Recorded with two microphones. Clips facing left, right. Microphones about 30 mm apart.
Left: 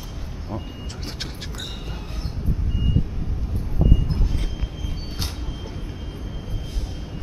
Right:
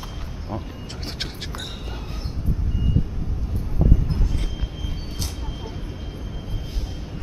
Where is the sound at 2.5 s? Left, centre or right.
Centre.